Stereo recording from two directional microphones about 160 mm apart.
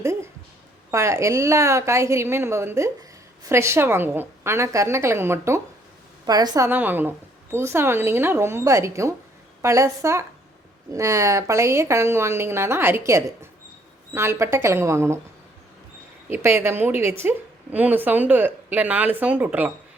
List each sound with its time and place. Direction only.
0.0 s a woman's voice: 15° right (ahead or behind)
6.7 s a woman's voice: 10° right (ahead or behind)
16.3 s a woman's voice: 15° right (ahead or behind)